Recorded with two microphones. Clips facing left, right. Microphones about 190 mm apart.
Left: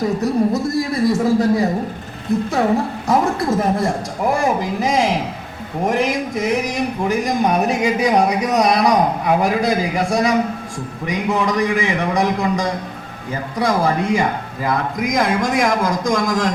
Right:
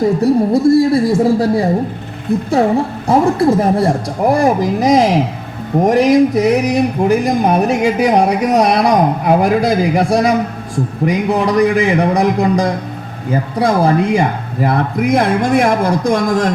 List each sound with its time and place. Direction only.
0.2 s speech: 30° right (ahead or behind)
3.1 s speech: 30° right (ahead or behind)